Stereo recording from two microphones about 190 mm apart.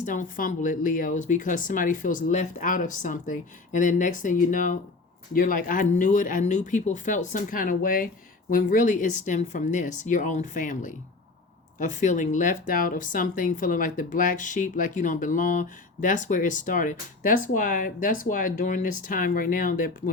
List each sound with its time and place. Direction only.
0.0 s speech: 45° left (ahead or behind)